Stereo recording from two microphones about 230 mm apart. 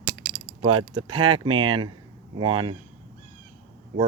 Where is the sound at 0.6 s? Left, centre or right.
Right.